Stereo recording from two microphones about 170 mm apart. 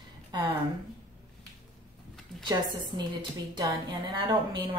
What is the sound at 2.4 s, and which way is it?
A woman's voice, 25° right (ahead or behind).